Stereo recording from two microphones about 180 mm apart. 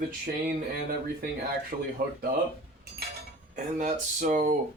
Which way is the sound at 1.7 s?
40° right (ahead or behind).